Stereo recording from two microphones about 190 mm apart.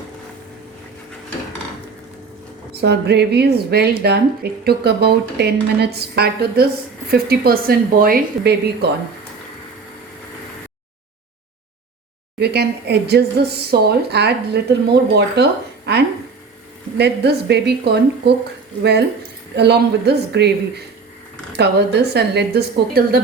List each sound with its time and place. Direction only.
2.8 s a woman's voice: 60° right (ahead or behind)
12.4 s a woman's voice: 60° right (ahead or behind)